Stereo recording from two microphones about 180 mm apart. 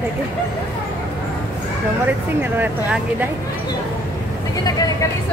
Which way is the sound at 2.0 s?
10° right (ahead or behind).